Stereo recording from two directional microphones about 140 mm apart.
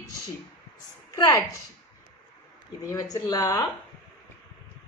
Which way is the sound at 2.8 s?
25° left (ahead or behind).